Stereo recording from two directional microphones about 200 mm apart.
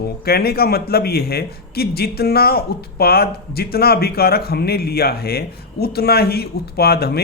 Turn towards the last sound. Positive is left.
turn(degrees=50)  # may be behind; listen again after turning